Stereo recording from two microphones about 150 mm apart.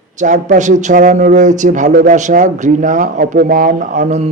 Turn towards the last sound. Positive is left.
turn(degrees=-50)  # may be behind; listen again after turning